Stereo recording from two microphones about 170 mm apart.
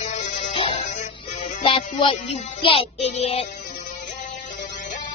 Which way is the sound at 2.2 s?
40° left (ahead or behind).